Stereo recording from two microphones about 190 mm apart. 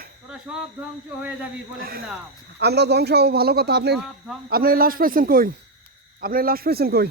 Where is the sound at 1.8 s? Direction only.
50° right (ahead or behind).